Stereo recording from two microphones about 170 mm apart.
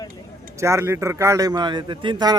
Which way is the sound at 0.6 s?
15° right (ahead or behind).